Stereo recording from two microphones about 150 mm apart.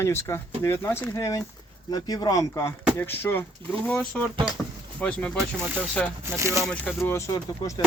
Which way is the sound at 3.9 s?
5° left (ahead or behind).